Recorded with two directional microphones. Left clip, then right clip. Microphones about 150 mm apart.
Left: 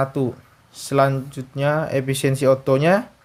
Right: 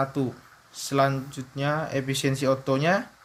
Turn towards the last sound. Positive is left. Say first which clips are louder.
# left 7 dB
turn(degrees=55)  # may be behind; listen again after turning